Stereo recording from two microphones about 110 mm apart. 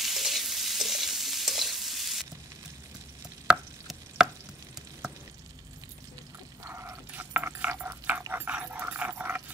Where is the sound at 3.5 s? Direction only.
5° right (ahead or behind).